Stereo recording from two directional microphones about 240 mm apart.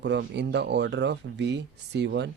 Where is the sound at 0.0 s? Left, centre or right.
Right.